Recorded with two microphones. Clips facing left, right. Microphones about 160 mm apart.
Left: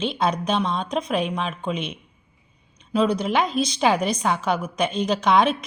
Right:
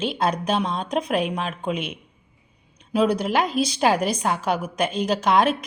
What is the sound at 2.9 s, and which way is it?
A woman's voice, 10° right (ahead or behind).